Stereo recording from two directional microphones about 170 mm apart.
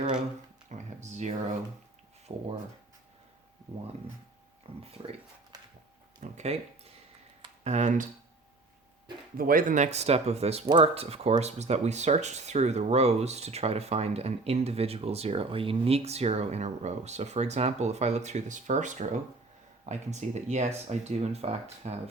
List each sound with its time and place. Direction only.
0.7 s speech: 45° right (ahead or behind)
4.7 s speech: 35° right (ahead or behind)
6.1 s speech: 45° right (ahead or behind)
9.4 s speech: 55° right (ahead or behind); by 22.1 s 40° right (ahead or behind)